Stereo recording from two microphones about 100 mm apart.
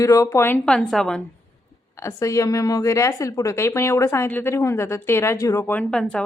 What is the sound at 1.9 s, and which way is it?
A woman's voice, 30° left (ahead or behind).